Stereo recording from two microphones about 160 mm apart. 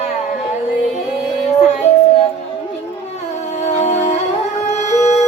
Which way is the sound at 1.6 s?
45° left (ahead or behind).